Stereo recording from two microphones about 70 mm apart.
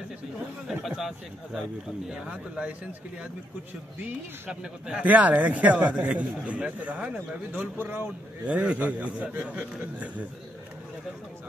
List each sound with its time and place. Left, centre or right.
0.7 s speech: centre
4.0 s speech: centre; by 8.1 s right
8.5 s speech: centre